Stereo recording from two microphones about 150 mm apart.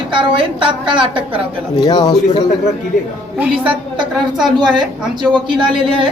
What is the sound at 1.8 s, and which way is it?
Speech, 25° left (ahead or behind).